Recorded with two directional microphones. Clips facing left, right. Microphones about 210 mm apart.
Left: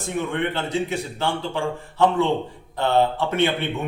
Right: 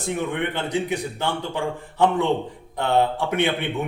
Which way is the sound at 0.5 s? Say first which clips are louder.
Even; 15° right (ahead or behind).